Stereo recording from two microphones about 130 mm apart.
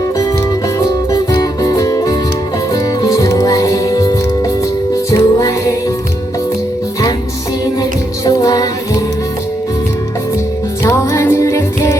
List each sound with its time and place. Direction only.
1.1 s music: 25° left (ahead or behind)
7.8 s music: 30° left (ahead or behind)
10.8 s music: 25° left (ahead or behind)